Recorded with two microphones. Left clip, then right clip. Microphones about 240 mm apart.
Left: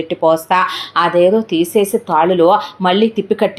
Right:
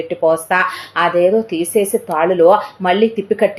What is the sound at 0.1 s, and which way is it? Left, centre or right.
A woman's voice, left.